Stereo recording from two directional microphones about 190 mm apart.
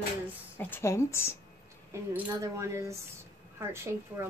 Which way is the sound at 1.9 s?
15° right (ahead or behind).